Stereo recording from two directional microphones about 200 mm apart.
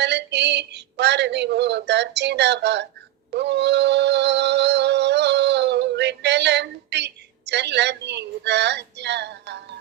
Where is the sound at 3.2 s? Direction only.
60° right (ahead or behind).